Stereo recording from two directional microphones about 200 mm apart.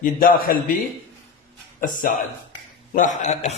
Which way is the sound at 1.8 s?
40° left (ahead or behind).